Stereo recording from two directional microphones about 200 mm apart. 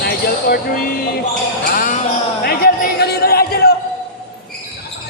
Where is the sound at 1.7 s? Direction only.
45° left (ahead or behind).